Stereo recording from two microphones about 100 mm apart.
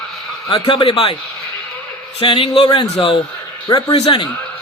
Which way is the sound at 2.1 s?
60° left (ahead or behind).